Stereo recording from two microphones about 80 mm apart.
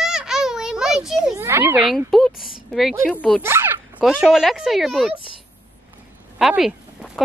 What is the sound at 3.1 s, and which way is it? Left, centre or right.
Speech, centre.